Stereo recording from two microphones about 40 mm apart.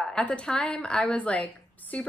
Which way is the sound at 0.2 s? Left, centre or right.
Left.